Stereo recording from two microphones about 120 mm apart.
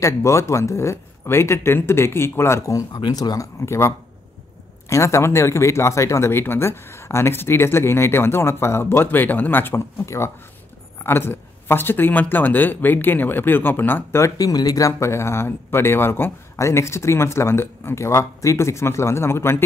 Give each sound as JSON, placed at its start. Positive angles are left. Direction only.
{"t": 0.0, "sound": "speech", "side_deg": 25}